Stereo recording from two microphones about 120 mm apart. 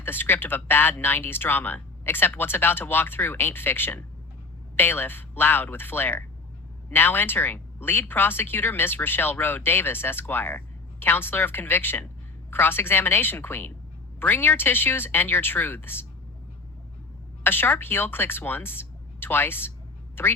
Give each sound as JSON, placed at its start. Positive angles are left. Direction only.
{"t": 0.0, "sound": "speech", "side_deg": 15}
{"t": 17.4, "sound": "speech", "side_deg": 15}